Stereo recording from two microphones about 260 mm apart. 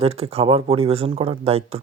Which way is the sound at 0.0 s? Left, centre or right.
Right.